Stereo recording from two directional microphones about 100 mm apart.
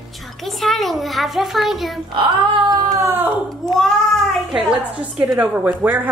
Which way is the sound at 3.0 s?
20° right (ahead or behind).